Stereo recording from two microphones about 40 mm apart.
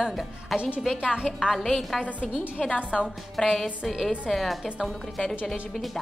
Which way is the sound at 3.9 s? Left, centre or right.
Centre.